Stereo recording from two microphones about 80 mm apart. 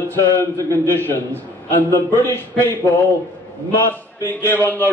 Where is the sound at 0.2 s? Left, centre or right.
Left.